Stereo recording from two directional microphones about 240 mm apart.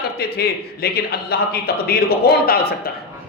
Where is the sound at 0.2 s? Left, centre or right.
Left.